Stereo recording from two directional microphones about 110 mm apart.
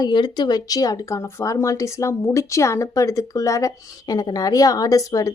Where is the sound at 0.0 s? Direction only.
40° left (ahead or behind).